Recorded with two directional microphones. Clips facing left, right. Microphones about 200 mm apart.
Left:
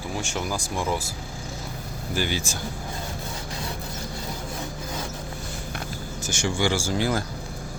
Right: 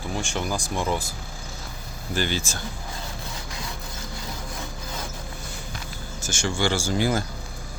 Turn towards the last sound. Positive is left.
turn(degrees=0)  # may be behind; listen again after turning